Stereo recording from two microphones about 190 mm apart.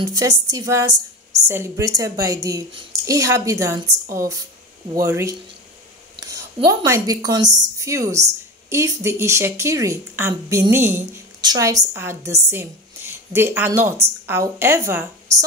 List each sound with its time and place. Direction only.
0.0 s a woman's voice: 20° right (ahead or behind)
6.3 s a woman's voice: 20° right (ahead or behind)